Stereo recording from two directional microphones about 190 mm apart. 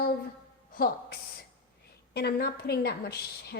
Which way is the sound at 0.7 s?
50° left (ahead or behind).